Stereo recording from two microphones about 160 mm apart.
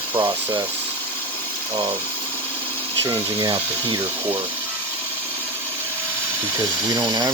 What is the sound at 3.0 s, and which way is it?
Speech, 30° right (ahead or behind).